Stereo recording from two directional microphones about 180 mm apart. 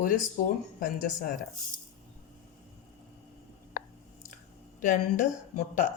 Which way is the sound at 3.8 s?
50° left (ahead or behind).